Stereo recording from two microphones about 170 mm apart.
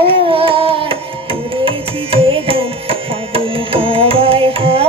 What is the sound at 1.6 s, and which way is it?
Music, 35° right (ahead or behind).